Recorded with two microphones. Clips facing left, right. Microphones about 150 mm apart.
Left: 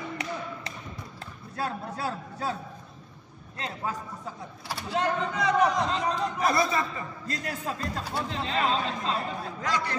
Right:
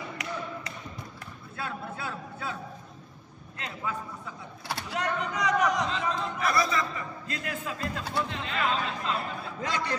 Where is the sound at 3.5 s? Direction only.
35° left (ahead or behind).